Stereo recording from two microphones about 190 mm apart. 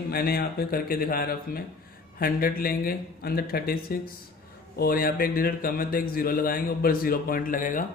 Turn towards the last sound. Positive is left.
turn(degrees=45)  # may be behind; listen again after turning